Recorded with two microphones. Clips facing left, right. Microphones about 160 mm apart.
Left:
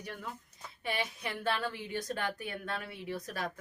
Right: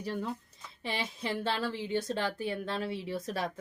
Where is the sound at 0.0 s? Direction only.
30° right (ahead or behind).